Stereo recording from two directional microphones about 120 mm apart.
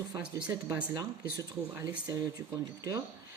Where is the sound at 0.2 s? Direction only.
10° right (ahead or behind).